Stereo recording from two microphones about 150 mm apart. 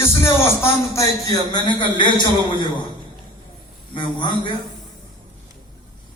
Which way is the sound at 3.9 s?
30° left (ahead or behind).